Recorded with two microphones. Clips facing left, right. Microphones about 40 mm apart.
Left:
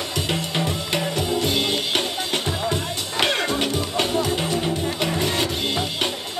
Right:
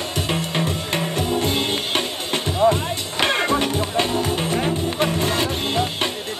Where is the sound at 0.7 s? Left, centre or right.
Right.